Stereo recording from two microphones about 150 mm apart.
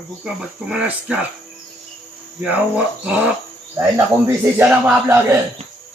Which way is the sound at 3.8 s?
15° right (ahead or behind).